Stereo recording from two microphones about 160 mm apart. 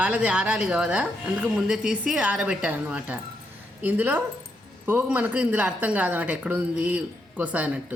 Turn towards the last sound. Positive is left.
turn(degrees=-10)  # may be behind; listen again after turning